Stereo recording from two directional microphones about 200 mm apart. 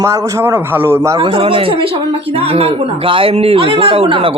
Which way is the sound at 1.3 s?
30° right (ahead or behind).